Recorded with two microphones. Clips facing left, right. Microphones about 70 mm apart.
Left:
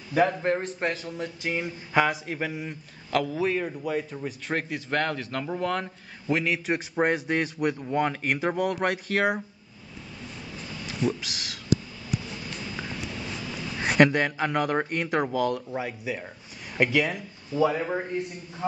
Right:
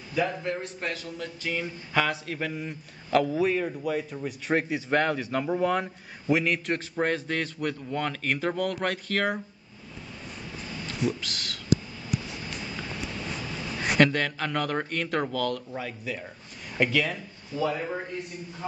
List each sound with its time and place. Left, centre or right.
0.1 s a man's voice: left; by 6.8 s centre
7.0 s a man's voice: centre
11.2 s a man's voice: centre
13.9 s a man's voice: centre
17.6 s speech: left